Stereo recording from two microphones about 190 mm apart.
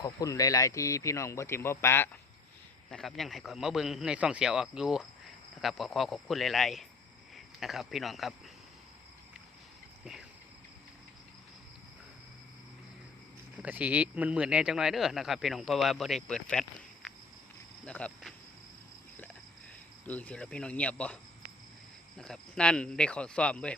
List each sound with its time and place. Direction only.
0.0 s speech: 20° left (ahead or behind)
2.9 s speech: centre (ahead or behind)
10.0 s cricket: 5° right (ahead or behind)
13.6 s speech: 5° right (ahead or behind)
17.8 s cricket: 5° left (ahead or behind)
20.1 s speech: 10° left (ahead or behind)
22.2 s speech: 5° left (ahead or behind)